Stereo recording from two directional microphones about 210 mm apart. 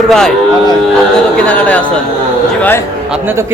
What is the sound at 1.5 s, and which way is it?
A man's voice, 5° left (ahead or behind).